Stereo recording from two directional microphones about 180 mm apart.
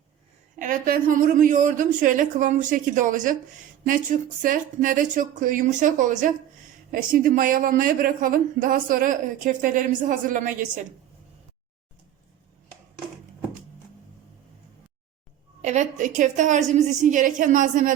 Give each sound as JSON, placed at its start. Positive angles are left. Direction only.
{"t": 0.6, "sound": "a woman's voice", "side_deg": -50}
{"t": 4.4, "sound": "a woman's voice", "side_deg": -50}
{"t": 15.6, "sound": "a woman's voice", "side_deg": -40}